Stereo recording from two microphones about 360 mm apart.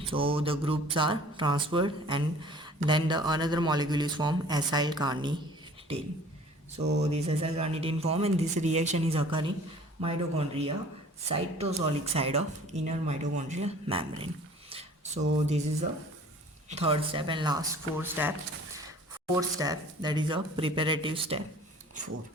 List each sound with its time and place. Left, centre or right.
0.0 s speech: centre
6.7 s speech: right
14.7 s a sound: centre
16.6 s speech: centre
19.4 s speech: centre